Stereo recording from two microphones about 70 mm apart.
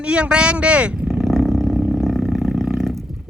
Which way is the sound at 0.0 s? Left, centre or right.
Centre.